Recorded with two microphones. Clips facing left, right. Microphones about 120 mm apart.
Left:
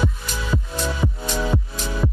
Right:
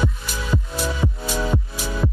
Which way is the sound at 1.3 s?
Centre (ahead or behind).